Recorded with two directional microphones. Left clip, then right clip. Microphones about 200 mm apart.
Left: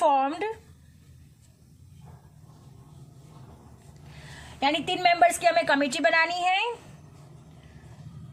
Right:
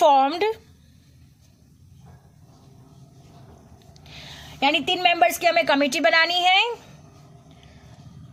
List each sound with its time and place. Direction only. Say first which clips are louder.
0.0 s speech: right 6 dB; 40° right (ahead or behind)
4.2 s a woman's voice: right 4 dB; 30° right (ahead or behind)